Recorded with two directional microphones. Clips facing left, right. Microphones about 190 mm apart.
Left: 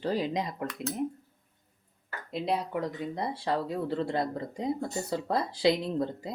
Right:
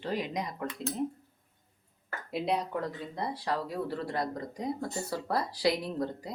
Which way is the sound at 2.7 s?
15° left (ahead or behind).